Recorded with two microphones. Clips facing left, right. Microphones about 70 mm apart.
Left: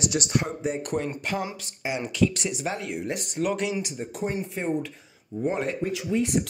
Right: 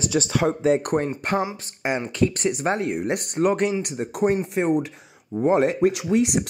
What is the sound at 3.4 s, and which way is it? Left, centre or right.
Speech, right.